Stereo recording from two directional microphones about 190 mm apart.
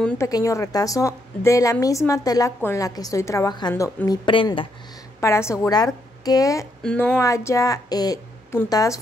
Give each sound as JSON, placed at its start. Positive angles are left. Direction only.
{"t": 0.2, "sound": "a woman's voice", "side_deg": 15}
{"t": 5.2, "sound": "a woman's voice", "side_deg": 15}